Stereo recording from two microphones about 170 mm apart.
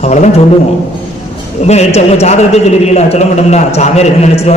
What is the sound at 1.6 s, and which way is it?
A man's voice, 40° left (ahead or behind).